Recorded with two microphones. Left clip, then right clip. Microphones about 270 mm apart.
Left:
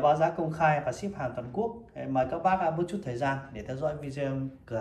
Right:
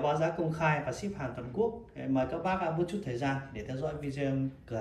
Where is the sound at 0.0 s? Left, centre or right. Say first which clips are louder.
Left 5 dB; centre.